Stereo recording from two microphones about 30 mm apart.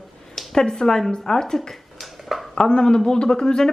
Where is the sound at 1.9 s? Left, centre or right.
Centre.